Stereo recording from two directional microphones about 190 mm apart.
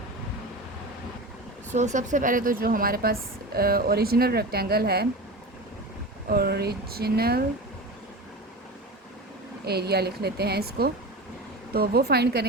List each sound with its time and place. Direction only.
1.7 s speech: 40° right (ahead or behind); by 5.0 s 55° right (ahead or behind)
6.3 s speech: 55° right (ahead or behind)
9.6 s speech: 55° right (ahead or behind)